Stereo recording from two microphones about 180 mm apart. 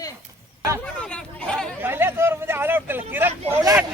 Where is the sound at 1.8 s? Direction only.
10° right (ahead or behind).